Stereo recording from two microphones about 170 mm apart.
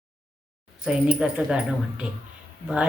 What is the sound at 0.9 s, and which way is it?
Speech, 5° right (ahead or behind).